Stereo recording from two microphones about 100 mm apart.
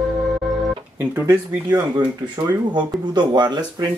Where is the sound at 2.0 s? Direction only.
45° right (ahead or behind).